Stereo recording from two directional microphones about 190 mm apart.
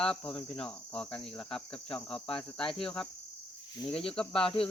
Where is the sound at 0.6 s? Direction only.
5° left (ahead or behind).